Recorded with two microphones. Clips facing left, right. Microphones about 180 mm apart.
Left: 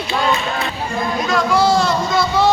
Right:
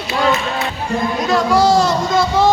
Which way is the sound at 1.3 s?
40° right (ahead or behind).